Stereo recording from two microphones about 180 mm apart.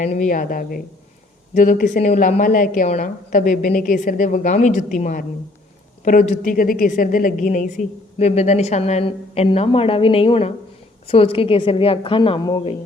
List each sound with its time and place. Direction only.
0.0 s a woman's voice: 45° left (ahead or behind); by 12.6 s 20° left (ahead or behind)